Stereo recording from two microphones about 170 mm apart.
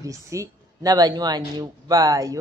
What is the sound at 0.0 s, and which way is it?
A woman's voice, 20° right (ahead or behind).